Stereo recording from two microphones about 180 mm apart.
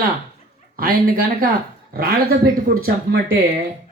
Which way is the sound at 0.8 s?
55° right (ahead or behind).